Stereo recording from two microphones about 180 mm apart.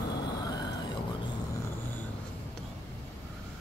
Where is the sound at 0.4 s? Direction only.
20° left (ahead or behind).